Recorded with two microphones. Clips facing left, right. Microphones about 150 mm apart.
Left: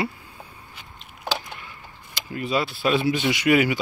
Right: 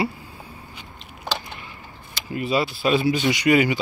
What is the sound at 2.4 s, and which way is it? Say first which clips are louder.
Speech: right 2 dB; 5° right (ahead or behind).